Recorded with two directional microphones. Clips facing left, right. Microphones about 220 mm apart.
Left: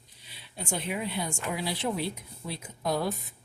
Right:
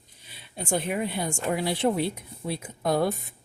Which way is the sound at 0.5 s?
50° right (ahead or behind).